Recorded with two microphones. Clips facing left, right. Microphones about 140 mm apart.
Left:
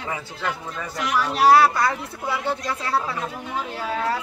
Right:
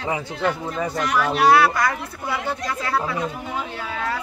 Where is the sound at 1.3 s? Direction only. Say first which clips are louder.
Left 1 dB; 35° left (ahead or behind).